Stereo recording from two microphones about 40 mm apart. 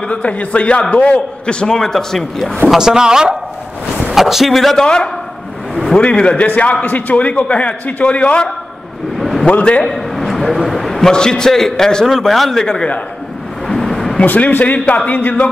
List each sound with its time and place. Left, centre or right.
0.1 s a man's voice: left
1.8 s a man's voice: centre
2.8 s speech: centre
4.1 s speech: centre
4.8 s a man's voice: left
9.2 s a sound: centre
9.5 s a man's voice: left
9.8 s a sound: centre
10.7 s a man's voice: centre
12.3 s speech: centre
12.5 s a man's voice: centre
13.7 s a sound: centre
14.2 s speech: left